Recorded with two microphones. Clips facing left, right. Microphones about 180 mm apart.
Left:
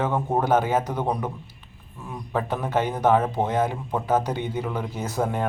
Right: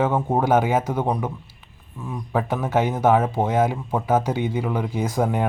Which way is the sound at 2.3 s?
10° right (ahead or behind).